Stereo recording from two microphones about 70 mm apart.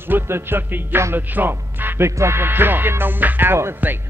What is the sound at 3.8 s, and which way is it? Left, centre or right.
Speech, right.